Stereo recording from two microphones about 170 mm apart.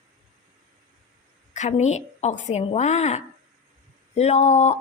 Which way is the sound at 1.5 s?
45° left (ahead or behind).